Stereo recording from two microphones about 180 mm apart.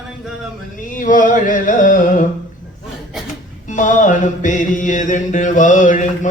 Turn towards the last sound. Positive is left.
turn(degrees=45)  # may be behind; listen again after turning